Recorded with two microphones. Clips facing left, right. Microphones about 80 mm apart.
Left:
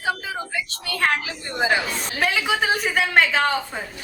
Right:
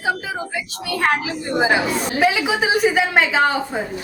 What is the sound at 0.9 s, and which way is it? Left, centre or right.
A woman's voice, centre.